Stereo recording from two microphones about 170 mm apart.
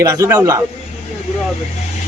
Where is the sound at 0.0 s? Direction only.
20° right (ahead or behind).